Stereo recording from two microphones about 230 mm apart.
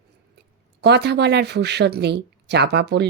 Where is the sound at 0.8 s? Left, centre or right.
Right.